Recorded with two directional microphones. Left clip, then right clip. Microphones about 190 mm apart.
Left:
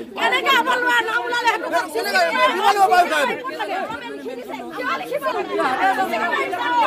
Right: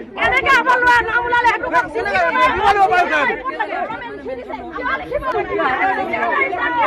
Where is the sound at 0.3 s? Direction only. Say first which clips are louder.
Right 4 dB; 65° left (ahead or behind).